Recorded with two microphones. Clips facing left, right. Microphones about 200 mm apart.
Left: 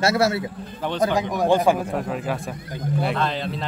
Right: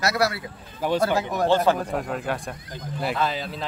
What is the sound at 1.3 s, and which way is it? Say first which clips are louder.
Speech: left 2 dB; 15° left (ahead or behind).